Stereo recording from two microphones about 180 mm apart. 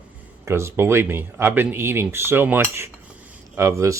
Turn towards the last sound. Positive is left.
turn(degrees=-15)  # may be behind; listen again after turning